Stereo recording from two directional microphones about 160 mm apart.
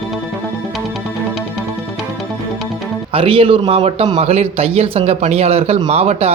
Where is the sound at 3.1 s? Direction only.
35° right (ahead or behind).